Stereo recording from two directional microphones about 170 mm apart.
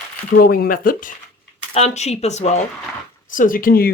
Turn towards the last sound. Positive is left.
turn(degrees=60)  # may be behind; listen again after turning